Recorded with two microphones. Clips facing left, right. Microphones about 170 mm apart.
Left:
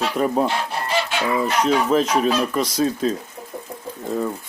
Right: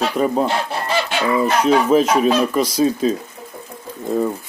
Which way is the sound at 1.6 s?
5° right (ahead or behind).